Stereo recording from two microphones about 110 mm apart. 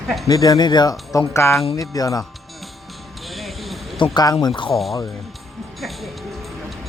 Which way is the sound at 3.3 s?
Centre (ahead or behind).